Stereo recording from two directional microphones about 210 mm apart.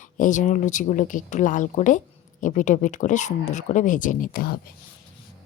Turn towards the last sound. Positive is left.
turn(degrees=45)  # may be behind; listen again after turning